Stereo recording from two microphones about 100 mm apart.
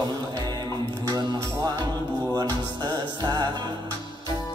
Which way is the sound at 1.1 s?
45° right (ahead or behind).